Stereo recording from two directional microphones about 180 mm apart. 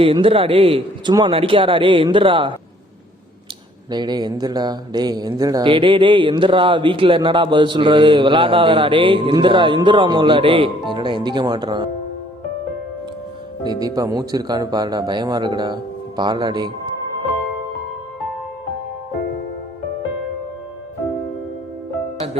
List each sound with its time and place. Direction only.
0.0 s a man's voice: 30° right (ahead or behind)
3.9 s speech: 25° right (ahead or behind)
13.7 s speech: 20° right (ahead or behind)